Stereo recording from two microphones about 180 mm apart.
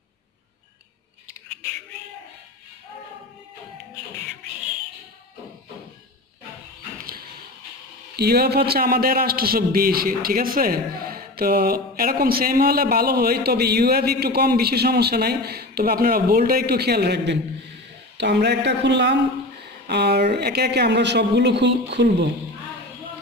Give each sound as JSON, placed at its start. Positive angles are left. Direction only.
{"t": 8.2, "sound": "a man's voice", "side_deg": -60}